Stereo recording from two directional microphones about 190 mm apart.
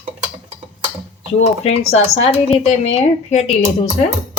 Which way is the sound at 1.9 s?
35° left (ahead or behind).